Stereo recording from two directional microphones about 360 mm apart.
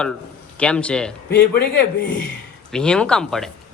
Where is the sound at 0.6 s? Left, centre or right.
Centre.